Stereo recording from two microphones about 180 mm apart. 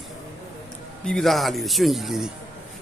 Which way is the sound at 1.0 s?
Centre (ahead or behind).